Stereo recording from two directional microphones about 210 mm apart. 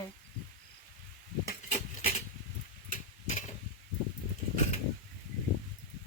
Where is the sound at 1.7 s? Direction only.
30° left (ahead or behind).